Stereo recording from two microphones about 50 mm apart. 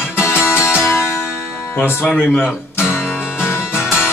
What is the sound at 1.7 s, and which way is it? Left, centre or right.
Speech, left.